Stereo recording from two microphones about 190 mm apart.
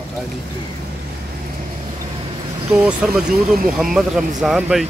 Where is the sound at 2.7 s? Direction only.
5° right (ahead or behind).